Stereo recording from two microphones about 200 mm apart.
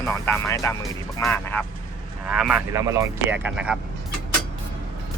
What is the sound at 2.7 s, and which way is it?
Speech, 15° right (ahead or behind).